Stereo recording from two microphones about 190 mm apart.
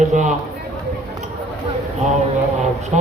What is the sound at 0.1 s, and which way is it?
Speech, 40° right (ahead or behind).